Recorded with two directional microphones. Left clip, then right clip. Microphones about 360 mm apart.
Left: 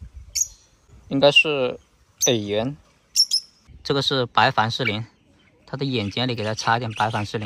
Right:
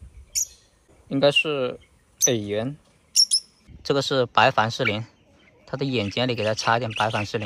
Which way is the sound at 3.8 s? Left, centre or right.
Centre.